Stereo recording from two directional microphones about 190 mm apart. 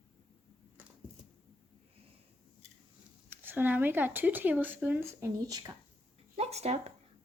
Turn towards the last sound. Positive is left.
turn(degrees=-35)  # may be behind; listen again after turning